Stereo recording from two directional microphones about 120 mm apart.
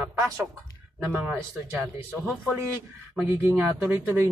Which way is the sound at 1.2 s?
15° right (ahead or behind).